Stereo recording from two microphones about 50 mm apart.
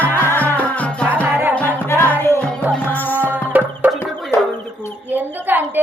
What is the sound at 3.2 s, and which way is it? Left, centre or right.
Chicken, right.